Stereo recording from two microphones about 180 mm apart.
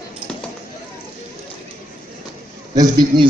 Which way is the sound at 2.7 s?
20° right (ahead or behind).